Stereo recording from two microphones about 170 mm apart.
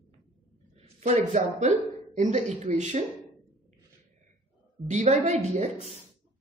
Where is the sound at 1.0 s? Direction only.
40° right (ahead or behind).